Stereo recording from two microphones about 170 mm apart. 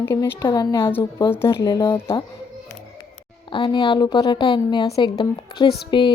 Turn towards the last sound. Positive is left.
turn(degrees=30)  # may be behind; listen again after turning